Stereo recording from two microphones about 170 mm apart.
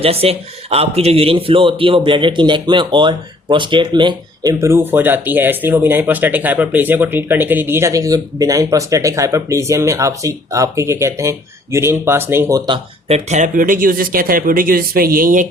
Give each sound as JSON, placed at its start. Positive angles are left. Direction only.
{"t": 0.0, "sound": "a man's voice", "side_deg": -35}
{"t": 4.6, "sound": "speech", "side_deg": -15}